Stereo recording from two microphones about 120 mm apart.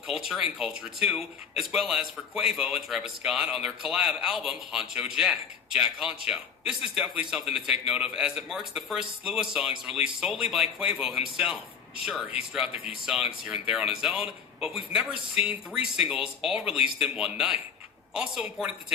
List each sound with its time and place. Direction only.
0.1 s a man's voice: 5° right (ahead or behind)
14.7 s speech: 50° left (ahead or behind)
15.4 s a man's voice: 10° right (ahead or behind)